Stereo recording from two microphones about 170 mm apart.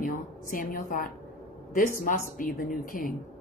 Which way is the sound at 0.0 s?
55° left (ahead or behind).